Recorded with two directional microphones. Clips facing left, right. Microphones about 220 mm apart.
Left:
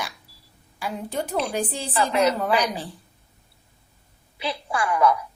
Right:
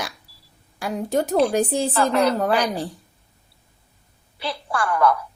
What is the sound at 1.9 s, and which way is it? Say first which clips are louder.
Speech: left 2 dB; 5° left (ahead or behind).